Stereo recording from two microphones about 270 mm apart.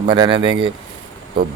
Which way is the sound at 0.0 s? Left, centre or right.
Centre.